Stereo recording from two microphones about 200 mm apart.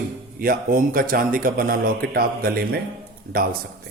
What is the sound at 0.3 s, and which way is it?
Mantra, 45° right (ahead or behind).